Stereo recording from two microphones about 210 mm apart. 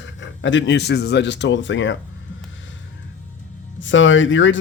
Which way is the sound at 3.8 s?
60° left (ahead or behind).